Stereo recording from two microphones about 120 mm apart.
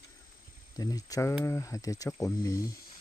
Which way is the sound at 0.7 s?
30° left (ahead or behind).